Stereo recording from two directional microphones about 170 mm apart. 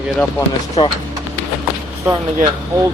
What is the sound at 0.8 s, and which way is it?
Speech, 25° left (ahead or behind).